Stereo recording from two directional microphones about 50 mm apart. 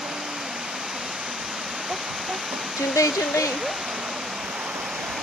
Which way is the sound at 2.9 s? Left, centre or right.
Left.